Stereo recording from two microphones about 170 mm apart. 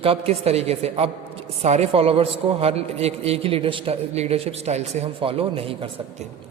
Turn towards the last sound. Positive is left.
turn(degrees=-35)  # may be behind; listen again after turning